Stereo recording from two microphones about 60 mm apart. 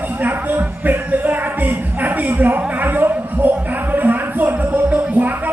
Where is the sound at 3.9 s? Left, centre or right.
Right.